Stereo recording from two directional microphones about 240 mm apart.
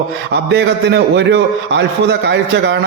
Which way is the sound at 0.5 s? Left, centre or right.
Right.